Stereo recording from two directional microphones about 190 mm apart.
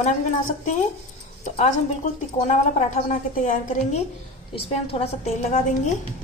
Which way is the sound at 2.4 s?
40° left (ahead or behind).